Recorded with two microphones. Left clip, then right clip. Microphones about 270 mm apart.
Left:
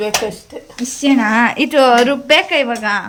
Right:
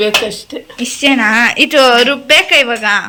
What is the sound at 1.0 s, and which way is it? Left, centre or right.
A woman's voice, centre.